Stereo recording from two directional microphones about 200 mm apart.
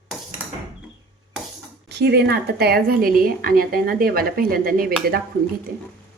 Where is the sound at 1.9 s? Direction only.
55° right (ahead or behind).